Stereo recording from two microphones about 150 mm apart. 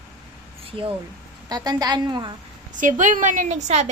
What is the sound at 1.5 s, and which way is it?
Speech, 25° right (ahead or behind).